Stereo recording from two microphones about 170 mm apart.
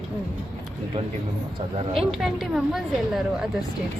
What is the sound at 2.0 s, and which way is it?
A woman's voice, centre (ahead or behind).